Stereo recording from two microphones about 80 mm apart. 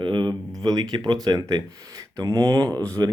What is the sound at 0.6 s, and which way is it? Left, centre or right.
Speech, right.